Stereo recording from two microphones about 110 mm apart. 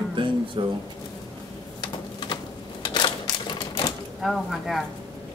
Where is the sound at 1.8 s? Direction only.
45° left (ahead or behind).